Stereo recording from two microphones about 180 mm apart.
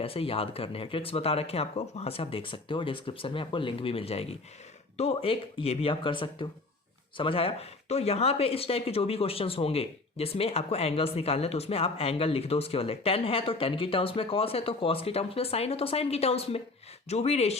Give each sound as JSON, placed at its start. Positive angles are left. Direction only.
{"t": 0.0, "sound": "speech", "side_deg": 30}